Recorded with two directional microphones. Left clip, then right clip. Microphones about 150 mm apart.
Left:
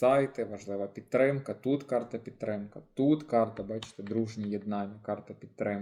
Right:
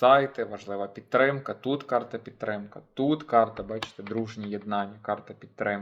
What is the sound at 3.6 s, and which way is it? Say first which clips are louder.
Speech: right 3 dB; 35° right (ahead or behind).